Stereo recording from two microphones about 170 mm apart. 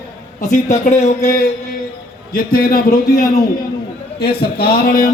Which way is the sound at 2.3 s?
60° left (ahead or behind).